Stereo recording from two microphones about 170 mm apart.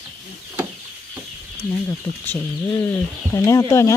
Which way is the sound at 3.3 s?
20° left (ahead or behind).